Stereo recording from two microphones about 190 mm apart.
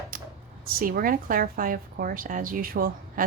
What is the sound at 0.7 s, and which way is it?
A woman's voice, 50° right (ahead or behind).